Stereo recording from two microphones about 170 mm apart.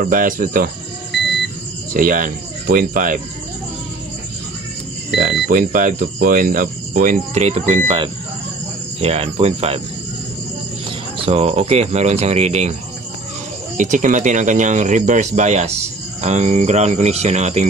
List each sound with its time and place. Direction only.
0.0 s speech: 55° right (ahead or behind)
2.0 s speech: 55° right (ahead or behind)
5.1 s speech: 60° right (ahead or behind); by 9.8 s 35° right (ahead or behind)
11.1 s speech: 35° right (ahead or behind)
13.7 s speech: 45° right (ahead or behind)